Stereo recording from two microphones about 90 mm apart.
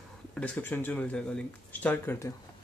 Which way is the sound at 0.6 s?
20° left (ahead or behind).